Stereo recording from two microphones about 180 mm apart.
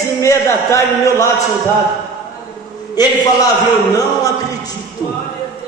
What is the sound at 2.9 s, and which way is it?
A man's voice, 20° left (ahead or behind).